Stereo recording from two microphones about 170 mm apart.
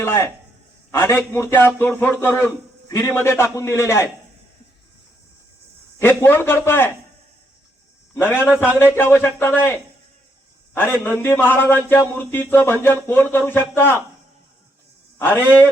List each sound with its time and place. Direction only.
0.0 s a man's voice: 15° left (ahead or behind)
6.0 s a man's voice: 15° left (ahead or behind)
8.1 s a man's voice: 15° left (ahead or behind)
10.8 s a man's voice: 10° left (ahead or behind)
15.2 s a man's voice: 10° left (ahead or behind)